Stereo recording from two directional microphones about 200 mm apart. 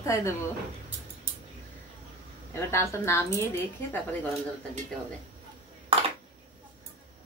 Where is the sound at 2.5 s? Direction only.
15° left (ahead or behind).